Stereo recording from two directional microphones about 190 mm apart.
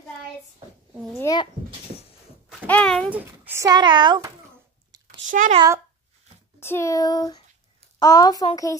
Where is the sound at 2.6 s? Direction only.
5° left (ahead or behind).